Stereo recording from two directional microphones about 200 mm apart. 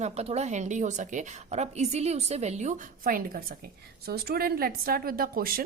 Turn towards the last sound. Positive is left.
turn(degrees=-45)  # may be behind; listen again after turning